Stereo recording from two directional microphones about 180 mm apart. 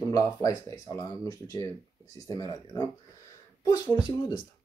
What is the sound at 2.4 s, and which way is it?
Speech, 20° left (ahead or behind).